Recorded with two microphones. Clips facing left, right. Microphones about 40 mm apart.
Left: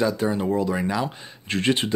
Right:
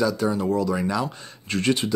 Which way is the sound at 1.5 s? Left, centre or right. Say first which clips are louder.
Even; left.